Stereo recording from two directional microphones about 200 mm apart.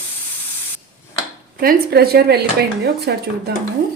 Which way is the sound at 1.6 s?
50° right (ahead or behind).